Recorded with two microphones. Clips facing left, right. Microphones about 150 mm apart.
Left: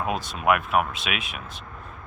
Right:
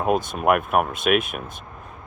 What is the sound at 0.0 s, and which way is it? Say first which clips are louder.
Speech: right 5 dB; 50° right (ahead or behind).